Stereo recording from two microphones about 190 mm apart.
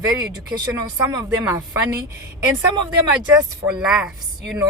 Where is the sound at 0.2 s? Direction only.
20° right (ahead or behind).